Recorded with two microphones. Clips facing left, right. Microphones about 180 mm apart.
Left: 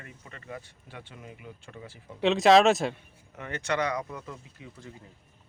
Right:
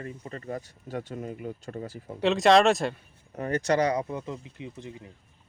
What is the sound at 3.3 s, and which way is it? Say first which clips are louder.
Speech: right 6 dB; 35° right (ahead or behind).